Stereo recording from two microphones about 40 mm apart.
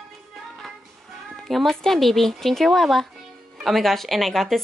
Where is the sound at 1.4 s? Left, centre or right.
Centre.